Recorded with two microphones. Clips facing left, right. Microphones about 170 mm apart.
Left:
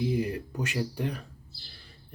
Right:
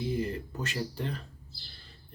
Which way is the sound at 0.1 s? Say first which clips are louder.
Left 3 dB; 10° left (ahead or behind).